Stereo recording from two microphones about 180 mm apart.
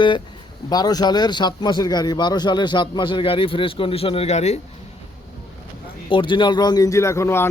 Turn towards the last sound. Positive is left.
turn(degrees=15)  # may be behind; listen again after turning